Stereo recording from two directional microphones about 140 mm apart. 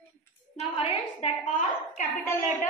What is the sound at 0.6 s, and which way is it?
A woman's voice, 50° left (ahead or behind).